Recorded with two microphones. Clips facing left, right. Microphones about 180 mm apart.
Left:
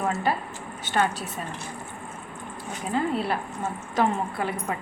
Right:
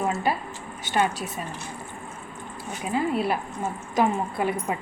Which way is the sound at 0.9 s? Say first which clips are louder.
Even; 10° right (ahead or behind).